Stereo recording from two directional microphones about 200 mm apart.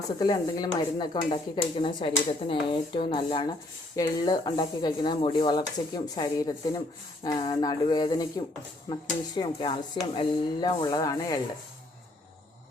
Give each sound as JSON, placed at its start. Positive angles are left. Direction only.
{"t": 0.2, "sound": "speech", "side_deg": 20}